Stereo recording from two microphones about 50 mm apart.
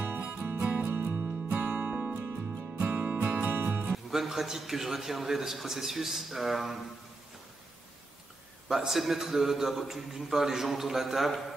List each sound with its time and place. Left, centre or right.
0.2 s music: right
0.8 s music: right
1.8 s music: right
3.4 s music: right
3.9 s a man's voice: centre
8.6 s a man's voice: centre